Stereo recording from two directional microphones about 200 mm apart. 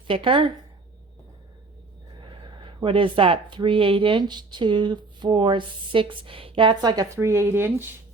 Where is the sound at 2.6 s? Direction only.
25° right (ahead or behind).